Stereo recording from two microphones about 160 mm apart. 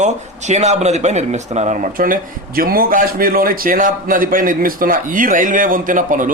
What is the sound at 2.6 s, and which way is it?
Speech, 65° right (ahead or behind).